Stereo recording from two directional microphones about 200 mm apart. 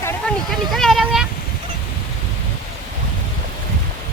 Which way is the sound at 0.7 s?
Centre (ahead or behind).